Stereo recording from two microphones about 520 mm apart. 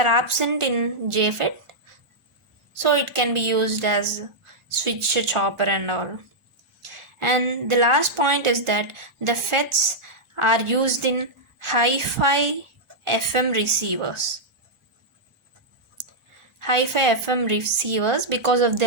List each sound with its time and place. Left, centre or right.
0.0 s a woman's voice: right
2.7 s a woman's voice: right
16.6 s a woman's voice: right